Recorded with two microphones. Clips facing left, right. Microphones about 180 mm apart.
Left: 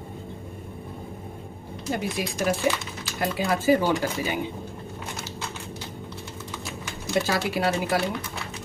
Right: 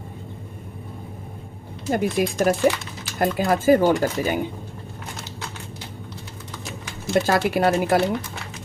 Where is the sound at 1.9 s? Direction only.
50° right (ahead or behind).